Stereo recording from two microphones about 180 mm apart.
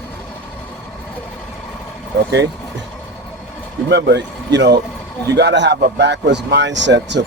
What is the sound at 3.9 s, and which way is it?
Speech, 70° right (ahead or behind).